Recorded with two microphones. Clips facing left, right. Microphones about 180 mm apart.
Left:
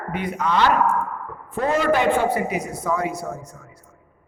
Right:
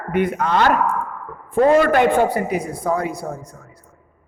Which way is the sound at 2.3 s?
30° right (ahead or behind).